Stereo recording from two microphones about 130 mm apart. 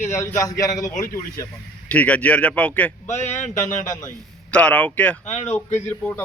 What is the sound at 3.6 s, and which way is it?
Speech, 20° left (ahead or behind).